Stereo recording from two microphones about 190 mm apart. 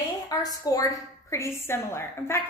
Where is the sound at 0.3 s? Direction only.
20° left (ahead or behind).